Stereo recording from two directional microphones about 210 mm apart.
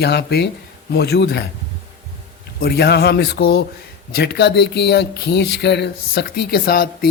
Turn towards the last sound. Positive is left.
turn(degrees=45)  # may be behind; listen again after turning